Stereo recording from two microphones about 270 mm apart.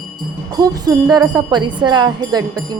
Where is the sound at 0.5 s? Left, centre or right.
Centre.